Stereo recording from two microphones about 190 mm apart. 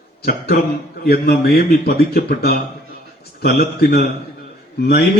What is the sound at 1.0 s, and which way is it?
A man's voice, 55° left (ahead or behind).